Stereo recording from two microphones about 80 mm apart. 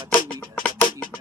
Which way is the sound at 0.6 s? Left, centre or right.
Left.